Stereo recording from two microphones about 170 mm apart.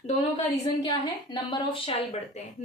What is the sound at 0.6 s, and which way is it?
A woman's voice, 25° left (ahead or behind).